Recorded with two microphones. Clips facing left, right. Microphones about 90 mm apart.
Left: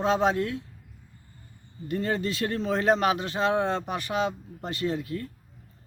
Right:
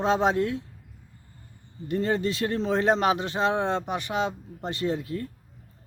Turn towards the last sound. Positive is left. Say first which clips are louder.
# right 1 dB
turn(degrees=-25)  # may be behind; listen again after turning